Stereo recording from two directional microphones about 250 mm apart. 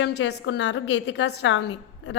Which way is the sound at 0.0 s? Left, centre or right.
Left.